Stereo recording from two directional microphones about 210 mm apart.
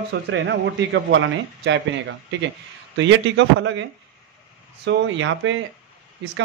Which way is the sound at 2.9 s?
60° right (ahead or behind).